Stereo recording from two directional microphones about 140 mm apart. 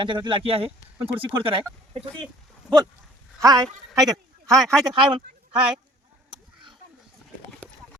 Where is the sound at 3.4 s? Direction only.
25° right (ahead or behind).